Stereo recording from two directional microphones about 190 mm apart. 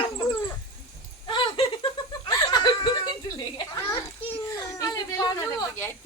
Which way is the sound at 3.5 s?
20° left (ahead or behind).